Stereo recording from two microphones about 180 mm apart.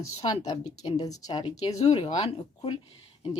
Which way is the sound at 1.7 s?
35° left (ahead or behind).